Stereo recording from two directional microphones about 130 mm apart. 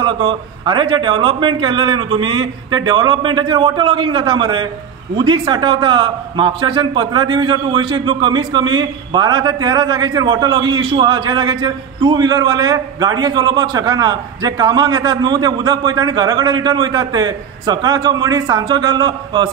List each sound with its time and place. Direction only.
0.0 s a man's voice: 40° right (ahead or behind)